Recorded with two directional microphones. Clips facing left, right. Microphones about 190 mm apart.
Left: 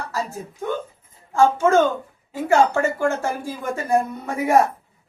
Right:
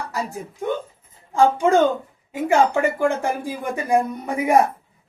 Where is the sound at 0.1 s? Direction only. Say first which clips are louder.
Even; 15° right (ahead or behind).